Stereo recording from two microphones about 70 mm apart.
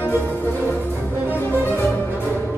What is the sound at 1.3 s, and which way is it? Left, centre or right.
Music, left.